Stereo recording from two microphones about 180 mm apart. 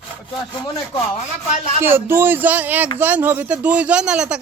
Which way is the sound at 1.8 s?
10° right (ahead or behind).